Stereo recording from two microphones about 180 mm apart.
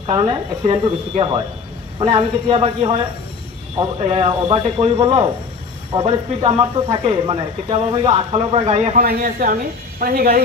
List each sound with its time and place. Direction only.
0.0 s speech: 30° right (ahead or behind)
9.0 s speech: 55° right (ahead or behind)